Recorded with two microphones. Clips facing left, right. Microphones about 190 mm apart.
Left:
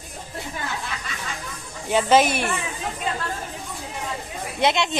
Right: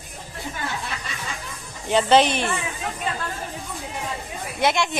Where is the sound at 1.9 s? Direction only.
10° left (ahead or behind).